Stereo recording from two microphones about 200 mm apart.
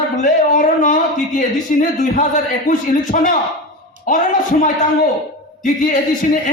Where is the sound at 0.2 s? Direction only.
40° left (ahead or behind).